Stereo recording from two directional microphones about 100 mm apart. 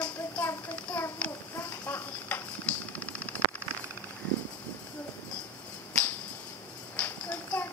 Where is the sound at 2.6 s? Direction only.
15° left (ahead or behind).